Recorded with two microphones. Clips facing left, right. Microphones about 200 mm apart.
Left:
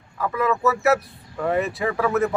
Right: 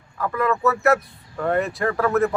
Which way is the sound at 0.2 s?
Centre (ahead or behind).